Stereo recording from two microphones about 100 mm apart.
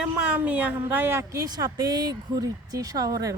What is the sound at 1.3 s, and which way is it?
A woman's voice, 40° right (ahead or behind).